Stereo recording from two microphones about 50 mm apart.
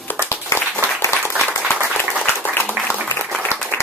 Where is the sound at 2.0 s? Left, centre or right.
Left.